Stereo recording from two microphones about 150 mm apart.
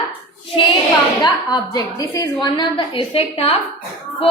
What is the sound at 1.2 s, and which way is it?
A woman's voice, 25° left (ahead or behind).